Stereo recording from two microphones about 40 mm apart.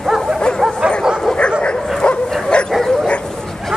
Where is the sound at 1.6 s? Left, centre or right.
Left.